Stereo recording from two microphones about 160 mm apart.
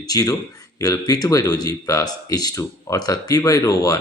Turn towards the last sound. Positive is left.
turn(degrees=20)  # may be behind; listen again after turning